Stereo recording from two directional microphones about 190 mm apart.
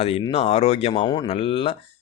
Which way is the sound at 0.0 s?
30° left (ahead or behind).